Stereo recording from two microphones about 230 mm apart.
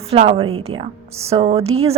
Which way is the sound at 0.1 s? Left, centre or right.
Right.